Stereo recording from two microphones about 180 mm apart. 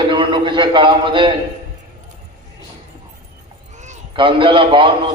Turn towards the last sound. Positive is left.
turn(degrees=-30)  # may be behind; listen again after turning